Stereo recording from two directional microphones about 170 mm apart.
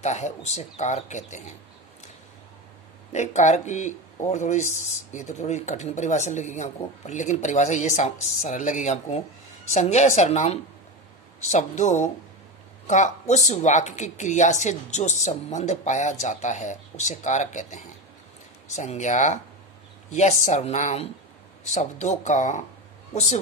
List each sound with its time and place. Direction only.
0.0 s speech: 40° left (ahead or behind)
3.1 s a woman's voice: 45° left (ahead or behind)